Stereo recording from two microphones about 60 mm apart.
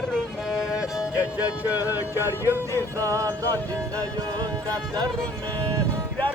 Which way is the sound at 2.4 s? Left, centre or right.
Right.